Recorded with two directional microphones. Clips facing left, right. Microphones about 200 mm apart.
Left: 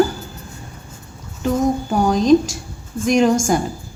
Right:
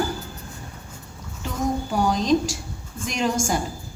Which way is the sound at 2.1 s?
50° left (ahead or behind).